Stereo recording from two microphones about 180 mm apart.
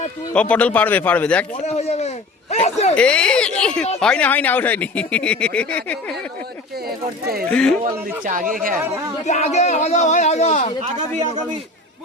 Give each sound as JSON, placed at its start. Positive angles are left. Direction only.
{"t": 0.3, "sound": "speech", "side_deg": 5}
{"t": 1.6, "sound": "speech", "side_deg": 35}
{"t": 2.9, "sound": "speech", "side_deg": 5}
{"t": 7.5, "sound": "speech", "side_deg": 5}
{"t": 7.9, "sound": "speech", "side_deg": -45}
{"t": 9.2, "sound": "speech", "side_deg": 40}